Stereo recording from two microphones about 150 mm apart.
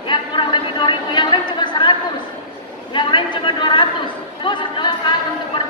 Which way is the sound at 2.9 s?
30° left (ahead or behind).